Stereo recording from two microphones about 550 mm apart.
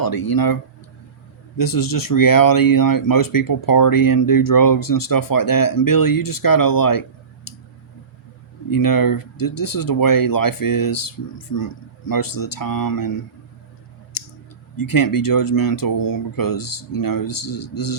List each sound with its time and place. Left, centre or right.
0.0 s speech: left
7.5 s tick: left
8.7 s speech: left
14.8 s speech: left